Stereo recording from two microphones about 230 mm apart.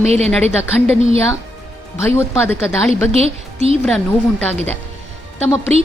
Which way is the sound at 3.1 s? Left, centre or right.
Right.